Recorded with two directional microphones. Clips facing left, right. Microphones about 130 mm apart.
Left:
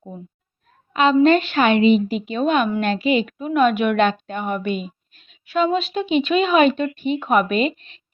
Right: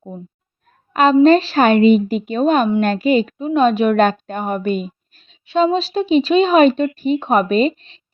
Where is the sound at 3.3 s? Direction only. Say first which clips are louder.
Right 3 dB; 25° right (ahead or behind).